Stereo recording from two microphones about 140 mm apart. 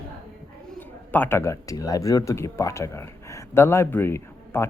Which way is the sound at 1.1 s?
15° left (ahead or behind).